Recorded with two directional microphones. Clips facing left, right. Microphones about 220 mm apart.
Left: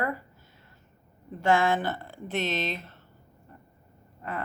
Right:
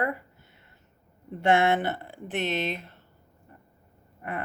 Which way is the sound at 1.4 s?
20° right (ahead or behind).